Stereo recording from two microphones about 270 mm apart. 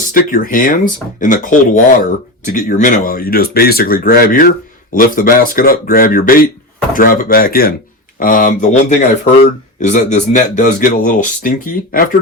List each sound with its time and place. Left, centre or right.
0.1 s speech: left